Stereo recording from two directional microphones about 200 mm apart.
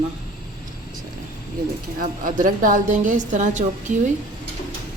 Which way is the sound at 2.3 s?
40° right (ahead or behind).